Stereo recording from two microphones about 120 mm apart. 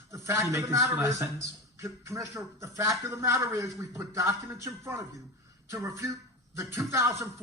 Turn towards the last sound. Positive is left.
turn(degrees=-25)  # may be behind; listen again after turning